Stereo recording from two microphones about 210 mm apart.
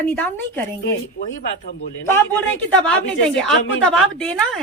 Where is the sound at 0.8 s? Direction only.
55° left (ahead or behind).